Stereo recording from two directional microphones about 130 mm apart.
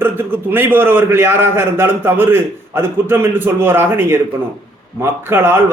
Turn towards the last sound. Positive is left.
turn(degrees=-15)  # may be behind; listen again after turning